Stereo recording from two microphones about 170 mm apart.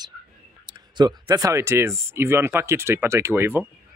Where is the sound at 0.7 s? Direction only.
25° right (ahead or behind).